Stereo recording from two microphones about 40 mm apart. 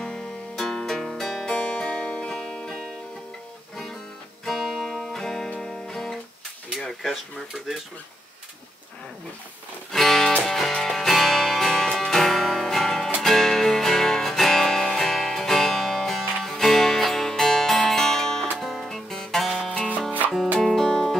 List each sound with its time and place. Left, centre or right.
0.0 s music: centre
1.5 s music: left
4.5 s music: centre
6.9 s pigeon: centre
9.9 s music: centre
20.7 s music: centre